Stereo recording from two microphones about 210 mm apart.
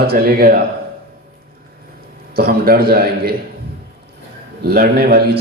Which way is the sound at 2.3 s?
45° right (ahead or behind).